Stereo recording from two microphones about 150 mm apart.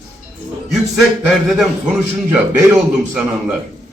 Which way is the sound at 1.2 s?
Centre (ahead or behind).